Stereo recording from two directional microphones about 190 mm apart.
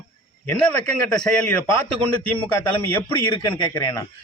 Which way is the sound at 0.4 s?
5° left (ahead or behind).